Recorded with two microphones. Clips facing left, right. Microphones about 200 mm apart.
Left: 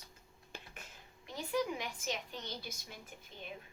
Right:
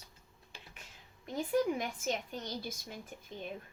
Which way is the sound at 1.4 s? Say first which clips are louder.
Right 5 dB; 45° right (ahead or behind).